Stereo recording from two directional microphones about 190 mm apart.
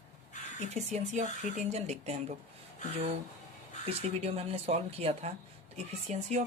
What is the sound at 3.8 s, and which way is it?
Speech, 30° right (ahead or behind).